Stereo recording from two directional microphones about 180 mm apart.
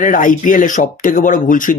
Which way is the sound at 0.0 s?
45° left (ahead or behind).